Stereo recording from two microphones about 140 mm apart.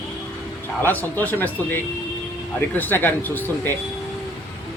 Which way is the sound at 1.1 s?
15° left (ahead or behind).